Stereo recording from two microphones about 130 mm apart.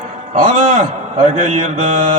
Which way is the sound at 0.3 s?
75° right (ahead or behind).